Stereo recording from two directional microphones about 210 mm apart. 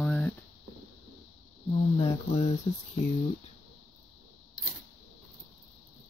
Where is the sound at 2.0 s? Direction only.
25° left (ahead or behind).